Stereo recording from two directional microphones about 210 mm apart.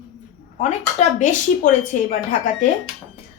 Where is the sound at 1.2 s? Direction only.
35° left (ahead or behind).